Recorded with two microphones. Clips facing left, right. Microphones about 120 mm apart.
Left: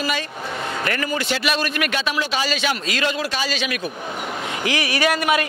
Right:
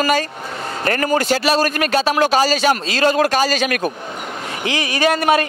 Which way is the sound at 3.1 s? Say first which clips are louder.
Right 9 dB; 50° right (ahead or behind).